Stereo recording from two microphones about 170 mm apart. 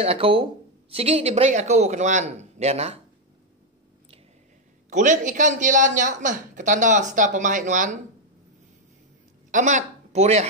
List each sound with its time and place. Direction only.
0.0 s speech: 35° right (ahead or behind)
4.8 s speech: 45° right (ahead or behind)
9.5 s speech: 45° right (ahead or behind)